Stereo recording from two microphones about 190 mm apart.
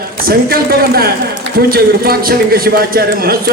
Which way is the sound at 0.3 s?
50° right (ahead or behind).